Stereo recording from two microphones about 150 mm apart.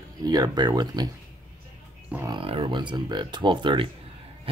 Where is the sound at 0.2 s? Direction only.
25° right (ahead or behind).